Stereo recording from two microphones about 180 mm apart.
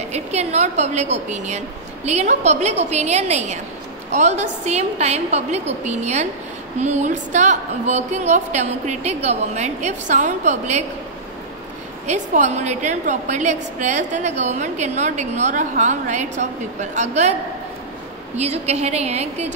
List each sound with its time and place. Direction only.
0.1 s a woman's voice: 35° right (ahead or behind)
12.1 s a woman's voice: 40° right (ahead or behind)